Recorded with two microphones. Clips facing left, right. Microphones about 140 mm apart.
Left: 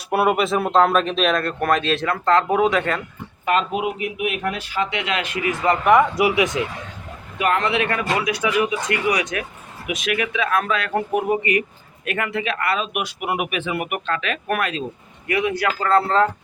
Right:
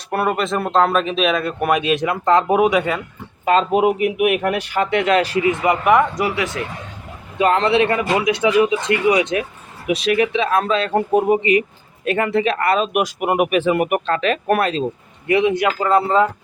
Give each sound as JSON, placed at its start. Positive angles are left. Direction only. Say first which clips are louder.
{"t": 0.1, "sound": "speech", "louder": "left 1 dB", "side_deg": 5}
{"t": 3.4, "sound": "speech", "louder": "right 5 dB", "side_deg": -30}
{"t": 3.8, "sound": "speech", "louder": "right 8 dB", "side_deg": -50}
{"t": 5.8, "sound": "speech", "louder": "left 1 dB", "side_deg": 0}
{"t": 6.2, "sound": "speech", "louder": "left 3 dB", "side_deg": 15}
{"t": 7.3, "sound": "speech", "louder": "right 5 dB", "side_deg": -30}